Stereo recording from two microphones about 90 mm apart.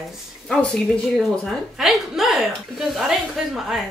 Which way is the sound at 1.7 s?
5° right (ahead or behind).